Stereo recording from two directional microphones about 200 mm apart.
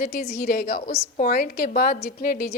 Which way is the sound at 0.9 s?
30° left (ahead or behind).